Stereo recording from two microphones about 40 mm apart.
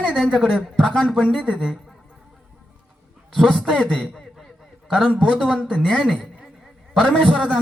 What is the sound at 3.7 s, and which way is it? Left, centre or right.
Speech, left.